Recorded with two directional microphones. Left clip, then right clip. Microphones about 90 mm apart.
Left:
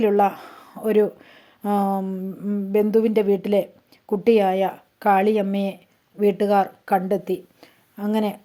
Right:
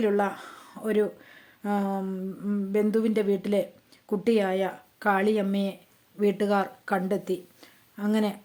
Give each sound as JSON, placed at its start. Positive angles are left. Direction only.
{"t": 0.0, "sound": "speech", "side_deg": 35}
{"t": 2.0, "sound": "speech", "side_deg": 25}
{"t": 2.7, "sound": "a woman's voice", "side_deg": 35}